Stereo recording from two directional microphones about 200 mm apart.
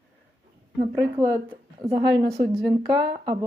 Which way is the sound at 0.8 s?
10° right (ahead or behind).